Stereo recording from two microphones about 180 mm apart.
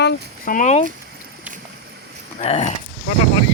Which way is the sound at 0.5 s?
40° left (ahead or behind).